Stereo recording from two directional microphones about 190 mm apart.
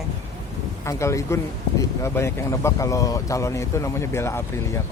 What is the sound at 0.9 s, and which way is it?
Speech, 15° left (ahead or behind).